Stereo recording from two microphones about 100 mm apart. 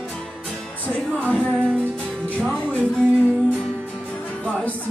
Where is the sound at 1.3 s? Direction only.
10° right (ahead or behind).